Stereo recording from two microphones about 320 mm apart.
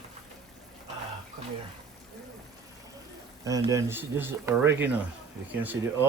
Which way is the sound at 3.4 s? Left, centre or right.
Centre.